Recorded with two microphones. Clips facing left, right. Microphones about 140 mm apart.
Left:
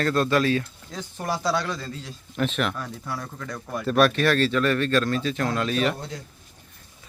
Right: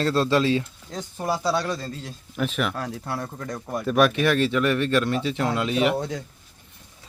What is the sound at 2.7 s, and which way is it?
Speech, 70° right (ahead or behind).